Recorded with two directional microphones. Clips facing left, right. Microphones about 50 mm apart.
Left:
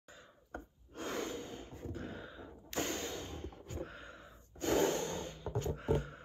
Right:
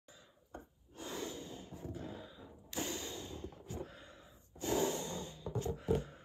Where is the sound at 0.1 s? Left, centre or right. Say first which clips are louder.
Left 4 dB; left.